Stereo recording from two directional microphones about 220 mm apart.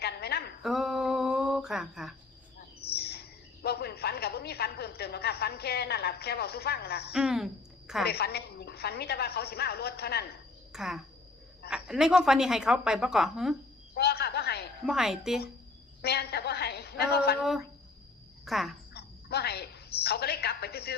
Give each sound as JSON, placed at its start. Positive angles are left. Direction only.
{"t": 0.0, "sound": "a sound", "side_deg": 45}
{"t": 0.6, "sound": "a sound", "side_deg": 0}
{"t": 2.9, "sound": "a woman's voice", "side_deg": 45}
{"t": 7.1, "sound": "a woman's voice", "side_deg": -5}
{"t": 8.0, "sound": "a woman's voice", "side_deg": 45}
{"t": 10.7, "sound": "a woman's voice", "side_deg": 0}
{"t": 13.9, "sound": "a sound", "side_deg": 45}
{"t": 14.8, "sound": "a woman's voice", "side_deg": 0}
{"t": 16.0, "sound": "a woman's voice", "side_deg": 45}
{"t": 18.4, "sound": "speech", "side_deg": 0}
{"t": 18.9, "sound": "a woman's voice", "side_deg": 45}